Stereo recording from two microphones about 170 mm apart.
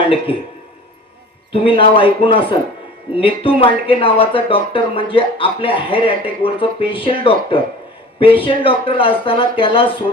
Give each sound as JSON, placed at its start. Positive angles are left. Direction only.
{"t": 0.3, "sound": "speech", "side_deg": 30}
{"t": 1.5, "sound": "speech", "side_deg": 30}